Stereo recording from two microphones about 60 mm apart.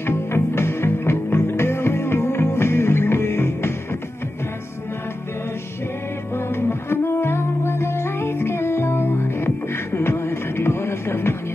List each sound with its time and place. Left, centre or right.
0.0 s music: left
6.3 s music: left